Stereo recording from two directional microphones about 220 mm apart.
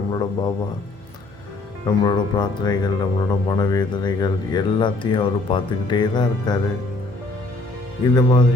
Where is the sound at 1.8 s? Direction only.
20° left (ahead or behind).